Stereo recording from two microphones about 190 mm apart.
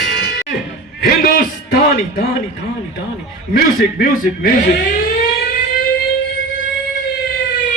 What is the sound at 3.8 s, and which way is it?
A man's voice, 45° left (ahead or behind).